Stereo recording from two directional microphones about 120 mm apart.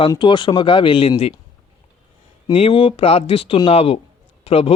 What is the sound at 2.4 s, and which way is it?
Speech, 50° left (ahead or behind).